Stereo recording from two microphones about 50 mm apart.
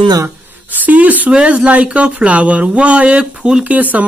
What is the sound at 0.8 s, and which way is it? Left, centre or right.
Speech, right.